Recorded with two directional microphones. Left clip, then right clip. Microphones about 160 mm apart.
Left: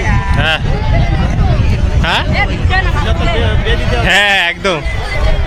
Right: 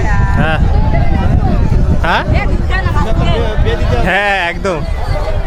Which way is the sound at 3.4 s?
30° right (ahead or behind).